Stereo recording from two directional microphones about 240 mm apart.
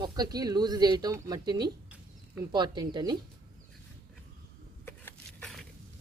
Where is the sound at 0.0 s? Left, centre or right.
Centre.